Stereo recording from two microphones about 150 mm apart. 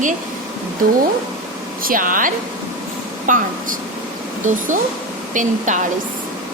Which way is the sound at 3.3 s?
60° right (ahead or behind).